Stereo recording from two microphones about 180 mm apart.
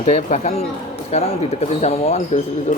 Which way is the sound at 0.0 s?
40° left (ahead or behind).